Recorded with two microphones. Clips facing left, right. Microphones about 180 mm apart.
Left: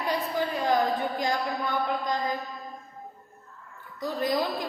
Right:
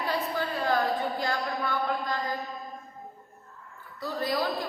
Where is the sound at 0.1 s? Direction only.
15° left (ahead or behind).